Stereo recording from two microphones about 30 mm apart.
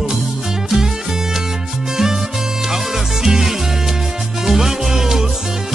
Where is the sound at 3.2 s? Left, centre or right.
Centre.